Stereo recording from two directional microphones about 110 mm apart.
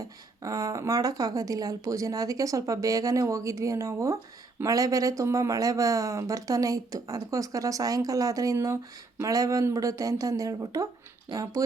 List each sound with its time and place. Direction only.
0.0 s speech: 30° right (ahead or behind)